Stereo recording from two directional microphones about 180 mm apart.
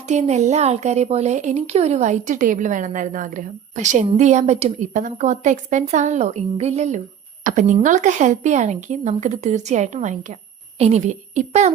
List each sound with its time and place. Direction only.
0.1 s a woman's voice: 40° right (ahead or behind)